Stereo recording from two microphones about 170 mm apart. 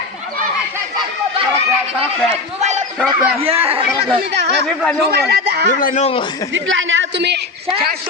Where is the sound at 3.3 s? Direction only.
35° right (ahead or behind).